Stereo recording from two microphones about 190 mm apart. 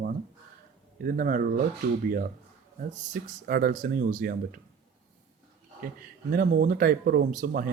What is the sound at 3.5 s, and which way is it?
Speech, 50° right (ahead or behind).